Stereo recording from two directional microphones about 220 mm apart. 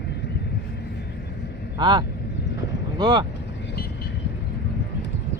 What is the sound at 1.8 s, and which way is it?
Speech, 20° right (ahead or behind).